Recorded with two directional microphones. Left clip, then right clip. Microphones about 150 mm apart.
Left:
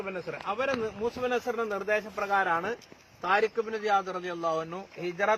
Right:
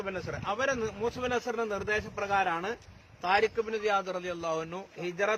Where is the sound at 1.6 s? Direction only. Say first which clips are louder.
Left 2 dB; 45° right (ahead or behind).